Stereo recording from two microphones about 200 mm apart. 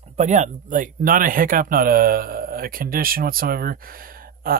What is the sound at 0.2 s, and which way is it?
Speech, 35° right (ahead or behind).